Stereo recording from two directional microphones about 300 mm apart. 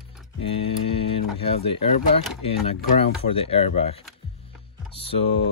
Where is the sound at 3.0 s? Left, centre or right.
Centre.